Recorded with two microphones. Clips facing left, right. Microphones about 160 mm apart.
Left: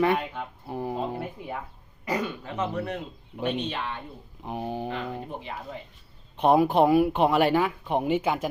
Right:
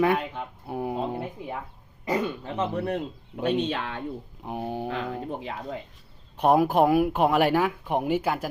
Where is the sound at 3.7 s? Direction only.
90° right.